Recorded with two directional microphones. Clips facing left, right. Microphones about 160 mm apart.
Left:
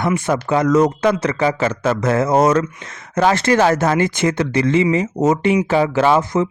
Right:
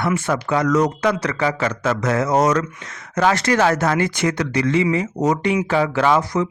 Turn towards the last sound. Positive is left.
turn(degrees=25)  # may be behind; listen again after turning